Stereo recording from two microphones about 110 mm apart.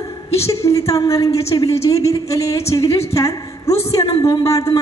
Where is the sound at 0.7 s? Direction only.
25° left (ahead or behind).